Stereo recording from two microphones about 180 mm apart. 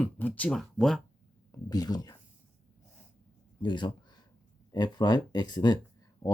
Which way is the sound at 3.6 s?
25° left (ahead or behind).